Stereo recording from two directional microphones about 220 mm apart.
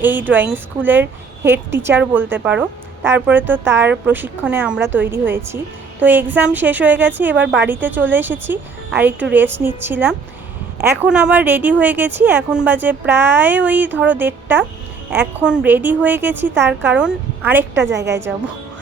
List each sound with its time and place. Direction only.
0.0 s speech: 10° right (ahead or behind)
7.3 s a woman's voice: 50° right (ahead or behind)
7.7 s speech: 10° right (ahead or behind)
17.9 s a woman's voice: 50° right (ahead or behind)